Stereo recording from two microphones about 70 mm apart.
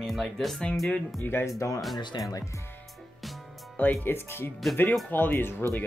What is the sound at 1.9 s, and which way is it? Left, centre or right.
Speech, left.